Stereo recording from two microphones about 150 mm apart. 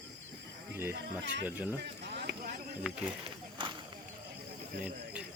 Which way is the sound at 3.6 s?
35° right (ahead or behind).